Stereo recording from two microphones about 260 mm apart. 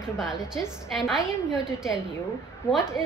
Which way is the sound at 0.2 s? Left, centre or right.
Centre.